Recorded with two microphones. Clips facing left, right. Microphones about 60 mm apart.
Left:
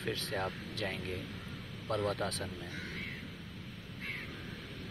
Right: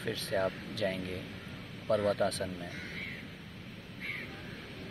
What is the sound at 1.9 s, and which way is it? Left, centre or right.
Speech, right.